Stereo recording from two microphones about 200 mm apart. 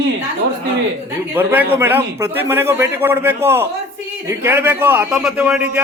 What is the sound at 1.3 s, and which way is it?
A man's voice, 10° right (ahead or behind).